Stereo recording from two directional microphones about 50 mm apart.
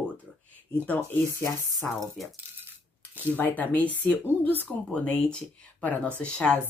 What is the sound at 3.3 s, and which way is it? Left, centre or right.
Speech, left.